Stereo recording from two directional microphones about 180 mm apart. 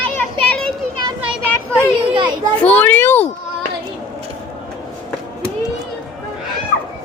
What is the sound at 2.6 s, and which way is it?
Speech, 10° left (ahead or behind).